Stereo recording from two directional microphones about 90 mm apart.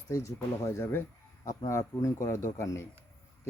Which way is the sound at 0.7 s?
30° left (ahead or behind).